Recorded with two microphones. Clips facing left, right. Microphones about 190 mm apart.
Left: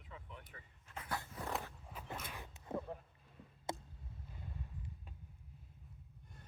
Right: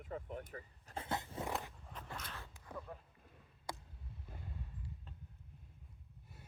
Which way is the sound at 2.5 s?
25° left (ahead or behind).